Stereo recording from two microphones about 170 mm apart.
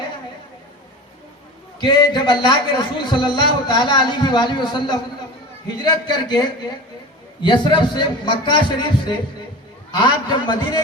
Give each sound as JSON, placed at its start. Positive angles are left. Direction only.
{"t": 1.8, "sound": "a man's voice", "side_deg": 25}